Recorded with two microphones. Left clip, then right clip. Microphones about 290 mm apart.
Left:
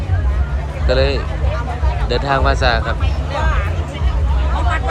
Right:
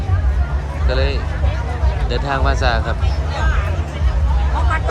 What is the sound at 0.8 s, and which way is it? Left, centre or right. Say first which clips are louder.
Speech: left 6 dB; centre.